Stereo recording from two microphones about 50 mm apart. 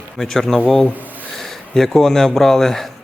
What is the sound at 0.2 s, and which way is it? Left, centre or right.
Speech, centre.